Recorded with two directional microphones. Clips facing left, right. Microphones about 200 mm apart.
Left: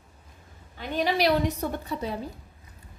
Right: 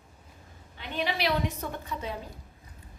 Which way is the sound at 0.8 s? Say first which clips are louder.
Left 6 dB; 45° left (ahead or behind).